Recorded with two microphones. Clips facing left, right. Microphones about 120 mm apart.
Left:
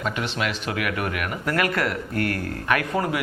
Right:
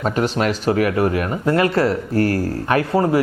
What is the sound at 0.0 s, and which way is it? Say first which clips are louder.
Speech: right 8 dB; 40° right (ahead or behind).